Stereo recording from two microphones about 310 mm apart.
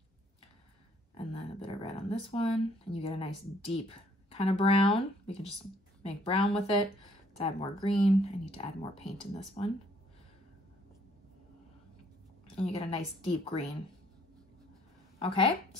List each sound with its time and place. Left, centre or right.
1.1 s speech: centre
12.5 s speech: centre
15.1 s a woman's voice: centre